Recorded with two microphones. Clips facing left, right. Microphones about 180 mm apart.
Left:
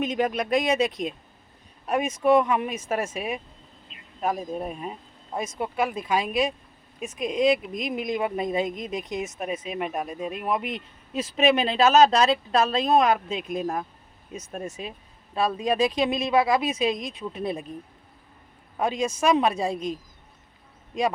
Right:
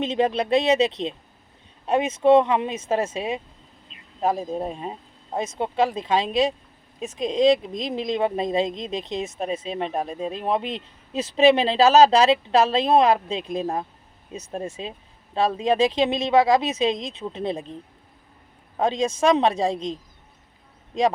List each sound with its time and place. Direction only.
0.0 s speech: 30° right (ahead or behind)
18.8 s speech: 25° right (ahead or behind)